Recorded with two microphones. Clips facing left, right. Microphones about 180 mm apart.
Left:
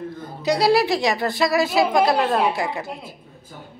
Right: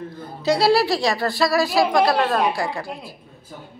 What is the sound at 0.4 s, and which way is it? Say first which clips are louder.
Speech: even; 15° left (ahead or behind).